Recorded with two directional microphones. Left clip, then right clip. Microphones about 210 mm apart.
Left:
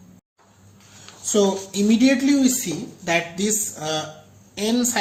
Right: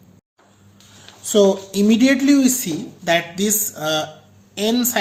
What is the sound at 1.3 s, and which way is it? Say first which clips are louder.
Speech: right 5 dB; 25° right (ahead or behind).